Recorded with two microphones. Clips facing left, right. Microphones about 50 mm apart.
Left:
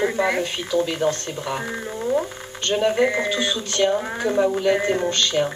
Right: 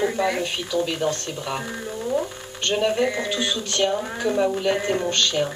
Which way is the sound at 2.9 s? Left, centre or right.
Left.